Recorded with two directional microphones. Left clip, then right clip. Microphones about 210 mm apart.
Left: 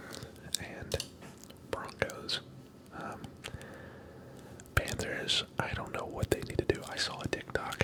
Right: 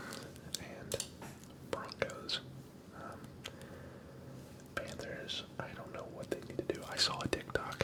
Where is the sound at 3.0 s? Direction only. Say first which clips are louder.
Left 6 dB; 20° left (ahead or behind).